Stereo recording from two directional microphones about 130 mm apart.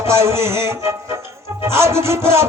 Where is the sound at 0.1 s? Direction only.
20° right (ahead or behind).